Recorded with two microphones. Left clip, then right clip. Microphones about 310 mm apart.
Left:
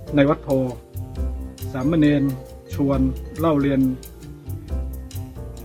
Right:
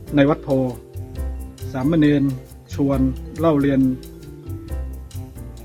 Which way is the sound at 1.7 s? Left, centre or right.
Centre.